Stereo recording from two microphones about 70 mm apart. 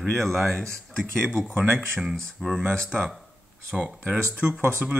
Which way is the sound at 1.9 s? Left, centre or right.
Centre.